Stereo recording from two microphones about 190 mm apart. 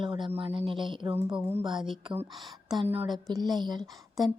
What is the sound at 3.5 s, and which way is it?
Speech, 20° right (ahead or behind).